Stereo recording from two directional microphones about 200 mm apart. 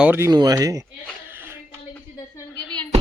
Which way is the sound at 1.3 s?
10° right (ahead or behind).